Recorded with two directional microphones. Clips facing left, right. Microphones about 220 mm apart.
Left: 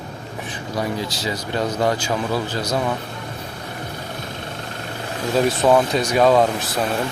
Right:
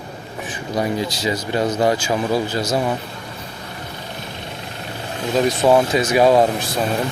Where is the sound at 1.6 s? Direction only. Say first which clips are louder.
Right 3 dB; 25° right (ahead or behind).